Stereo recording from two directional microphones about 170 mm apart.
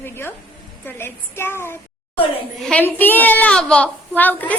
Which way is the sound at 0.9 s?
15° left (ahead or behind).